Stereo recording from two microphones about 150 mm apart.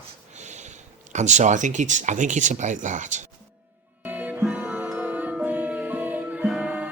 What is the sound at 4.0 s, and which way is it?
Music, 10° right (ahead or behind).